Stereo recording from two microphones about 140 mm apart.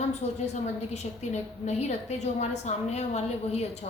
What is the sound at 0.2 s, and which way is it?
A woman's voice, 50° left (ahead or behind).